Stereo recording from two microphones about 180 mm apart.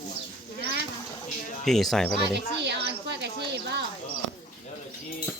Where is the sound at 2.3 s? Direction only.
70° right (ahead or behind).